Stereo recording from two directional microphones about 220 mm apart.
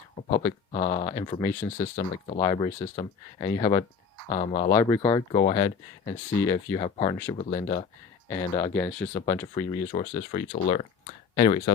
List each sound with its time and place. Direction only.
0.3 s speech: 20° left (ahead or behind)
0.7 s speech: 35° left (ahead or behind)
1.0 s speech: 20° left (ahead or behind)
4.4 s speech: 35° left (ahead or behind)
4.7 s speech: 10° left (ahead or behind)
5.3 s speech: 30° left (ahead or behind)
5.6 s speech: 15° left (ahead or behind)
6.7 s speech: 25° left (ahead or behind)
8.3 s speech: 15° left (ahead or behind)
9.6 s speech: 30° left (ahead or behind)